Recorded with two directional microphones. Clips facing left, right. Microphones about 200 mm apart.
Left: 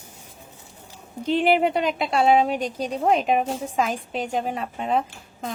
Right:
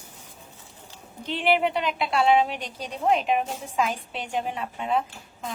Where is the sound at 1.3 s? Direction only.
40° left (ahead or behind).